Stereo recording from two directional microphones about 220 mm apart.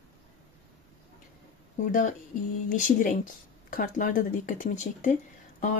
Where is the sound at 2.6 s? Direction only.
35° left (ahead or behind).